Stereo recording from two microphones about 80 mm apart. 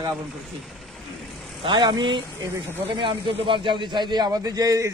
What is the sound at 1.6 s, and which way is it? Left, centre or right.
Speech, right.